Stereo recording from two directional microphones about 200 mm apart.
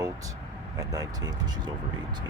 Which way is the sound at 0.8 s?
20° right (ahead or behind).